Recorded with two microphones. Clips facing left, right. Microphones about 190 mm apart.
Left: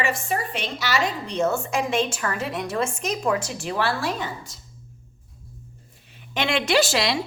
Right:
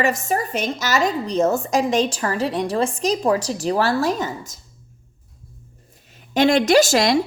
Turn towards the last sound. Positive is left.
turn(degrees=-45)  # may be behind; listen again after turning